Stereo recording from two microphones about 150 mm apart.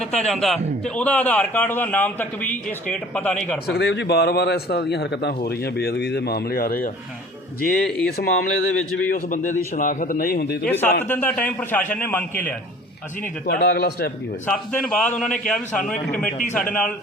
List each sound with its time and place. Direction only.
0.0 s a man's voice: 5° left (ahead or behind)
3.7 s a man's voice: 90° left
7.8 s speech: 5° left (ahead or behind)
8.1 s a man's voice: 90° left
9.0 s speech: 60° left (ahead or behind); by 10.7 s 85° left
10.7 s a man's voice: 15° left (ahead or behind)
13.4 s a man's voice: 90° left
14.4 s a man's voice: 5° left (ahead or behind)